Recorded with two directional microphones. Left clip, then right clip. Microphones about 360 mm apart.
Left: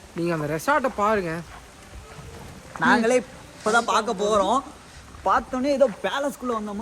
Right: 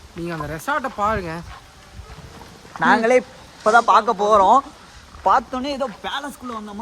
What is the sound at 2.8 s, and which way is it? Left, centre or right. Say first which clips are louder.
A man's voice: right 4 dB; right.